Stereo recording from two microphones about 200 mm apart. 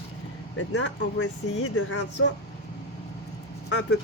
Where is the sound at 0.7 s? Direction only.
90° left.